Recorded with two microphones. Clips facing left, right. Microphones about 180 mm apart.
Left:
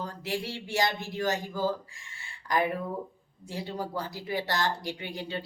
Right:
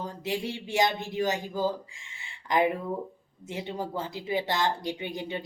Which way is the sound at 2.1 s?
20° right (ahead or behind).